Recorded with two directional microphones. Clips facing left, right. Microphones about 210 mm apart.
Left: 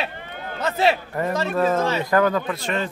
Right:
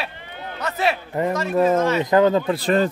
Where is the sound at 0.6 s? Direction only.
25° left (ahead or behind).